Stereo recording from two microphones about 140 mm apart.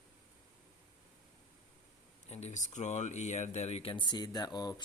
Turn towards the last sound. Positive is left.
turn(degrees=25)  # may be behind; listen again after turning